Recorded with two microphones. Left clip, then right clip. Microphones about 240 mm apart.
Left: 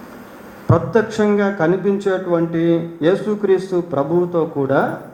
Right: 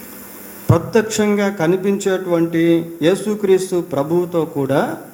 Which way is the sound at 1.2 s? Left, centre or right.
Right.